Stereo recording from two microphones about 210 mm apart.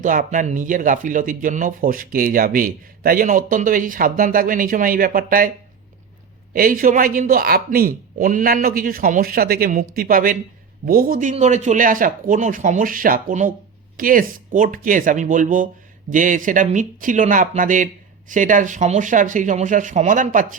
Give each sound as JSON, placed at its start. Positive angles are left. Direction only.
{"t": 0.0, "sound": "speech", "side_deg": -40}
{"t": 6.5, "sound": "speech", "side_deg": -40}